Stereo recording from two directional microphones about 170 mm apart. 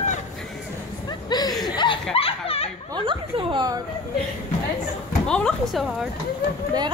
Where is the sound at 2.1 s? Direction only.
35° left (ahead or behind).